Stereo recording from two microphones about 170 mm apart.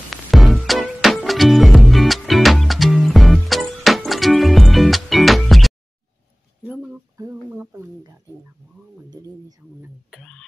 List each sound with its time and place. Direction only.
0.1 s music: centre (ahead or behind)
6.6 s a sound: 10° right (ahead or behind)
10.1 s music: 5° left (ahead or behind)